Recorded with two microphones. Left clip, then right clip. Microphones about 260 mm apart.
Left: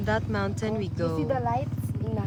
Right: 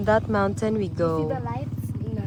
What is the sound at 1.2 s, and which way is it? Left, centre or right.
Speech, left.